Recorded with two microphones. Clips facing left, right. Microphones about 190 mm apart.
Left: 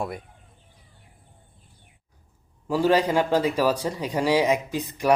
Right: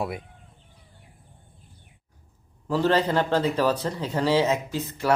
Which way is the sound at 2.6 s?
10° left (ahead or behind).